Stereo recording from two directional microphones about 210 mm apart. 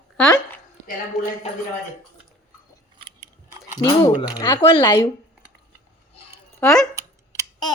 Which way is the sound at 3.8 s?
20° left (ahead or behind).